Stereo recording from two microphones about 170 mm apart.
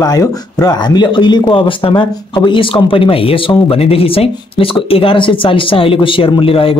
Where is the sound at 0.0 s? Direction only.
20° left (ahead or behind).